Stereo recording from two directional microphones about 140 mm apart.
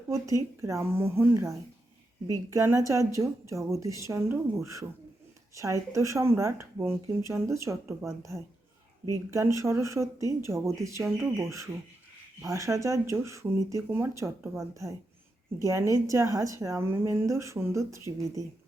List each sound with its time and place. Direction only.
0.1 s a woman's voice: 20° right (ahead or behind)